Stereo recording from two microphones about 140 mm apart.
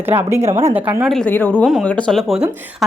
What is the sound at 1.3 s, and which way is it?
Speech, 15° left (ahead or behind).